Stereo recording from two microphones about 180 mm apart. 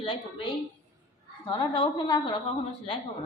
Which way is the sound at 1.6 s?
25° left (ahead or behind).